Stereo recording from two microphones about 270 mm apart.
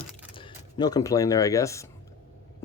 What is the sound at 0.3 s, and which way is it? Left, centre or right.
Speech, centre.